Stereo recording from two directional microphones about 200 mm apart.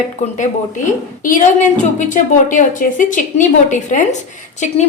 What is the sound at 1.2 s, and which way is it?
A woman's voice, 40° left (ahead or behind).